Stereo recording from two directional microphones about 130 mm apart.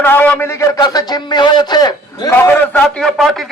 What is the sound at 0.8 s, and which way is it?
A man's voice, 35° left (ahead or behind).